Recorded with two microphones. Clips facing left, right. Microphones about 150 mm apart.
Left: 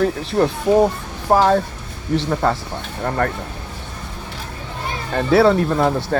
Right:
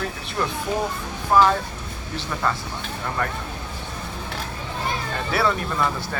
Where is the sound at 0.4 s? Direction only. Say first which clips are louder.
Left 10 dB; 55° left (ahead or behind).